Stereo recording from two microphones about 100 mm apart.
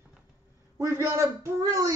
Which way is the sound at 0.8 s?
30° right (ahead or behind).